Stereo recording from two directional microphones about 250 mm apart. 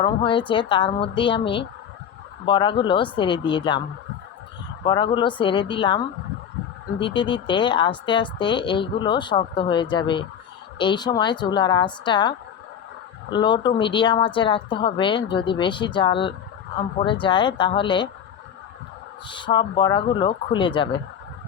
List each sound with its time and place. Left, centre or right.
0.0 s speech: centre
7.0 s a woman's voice: centre
13.3 s speech: centre
19.3 s speech: centre